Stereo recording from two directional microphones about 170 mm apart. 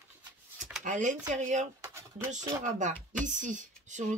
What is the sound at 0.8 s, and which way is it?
Speech, 50° right (ahead or behind).